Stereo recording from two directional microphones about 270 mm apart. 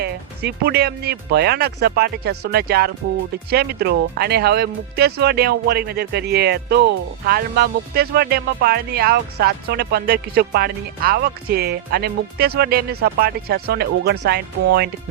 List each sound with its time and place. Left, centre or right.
0.0 s speech: right